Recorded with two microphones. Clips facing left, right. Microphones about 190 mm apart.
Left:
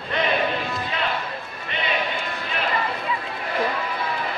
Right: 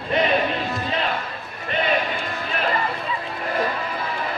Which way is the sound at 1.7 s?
45° right (ahead or behind).